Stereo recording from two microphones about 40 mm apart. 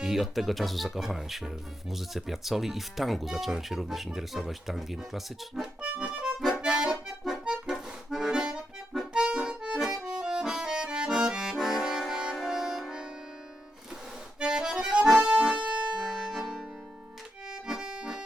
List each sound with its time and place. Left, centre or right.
0.0 s speech: centre
5.8 s accordion: right
6.6 s music: centre
7.4 s accordion: centre
9.7 s accordion: centre
11.6 s music: centre
14.3 s accordion: centre
15.2 s accordion: right
16.0 s music: centre
17.5 s accordion: centre